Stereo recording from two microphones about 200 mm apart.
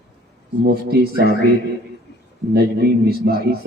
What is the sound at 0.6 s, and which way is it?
Speech, 50° right (ahead or behind).